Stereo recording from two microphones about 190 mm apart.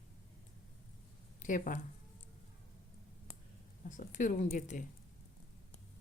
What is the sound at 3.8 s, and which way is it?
Speech, 40° left (ahead or behind).